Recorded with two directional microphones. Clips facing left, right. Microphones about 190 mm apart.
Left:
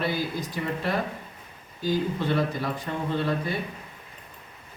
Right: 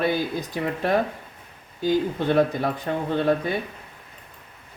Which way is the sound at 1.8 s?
50° right (ahead or behind).